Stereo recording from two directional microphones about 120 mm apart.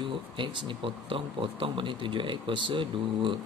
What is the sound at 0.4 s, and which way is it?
Speech, 45° right (ahead or behind).